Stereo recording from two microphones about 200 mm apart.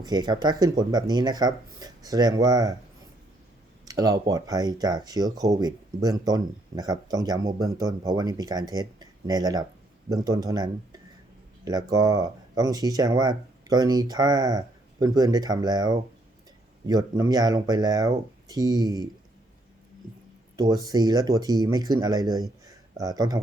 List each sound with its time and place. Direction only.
0.0 s speech: 20° right (ahead or behind)
3.8 s speech: 20° right (ahead or behind)
20.6 s speech: 20° right (ahead or behind)